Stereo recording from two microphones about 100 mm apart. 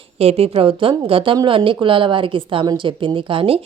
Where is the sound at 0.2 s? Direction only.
90° right.